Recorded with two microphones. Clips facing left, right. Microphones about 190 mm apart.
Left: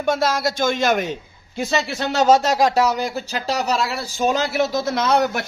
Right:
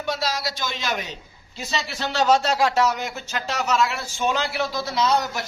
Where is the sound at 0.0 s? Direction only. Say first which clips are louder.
Left 7 dB; 50° left (ahead or behind).